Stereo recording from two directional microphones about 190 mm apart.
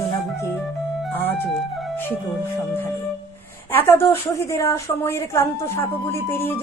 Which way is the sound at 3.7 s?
10° left (ahead or behind).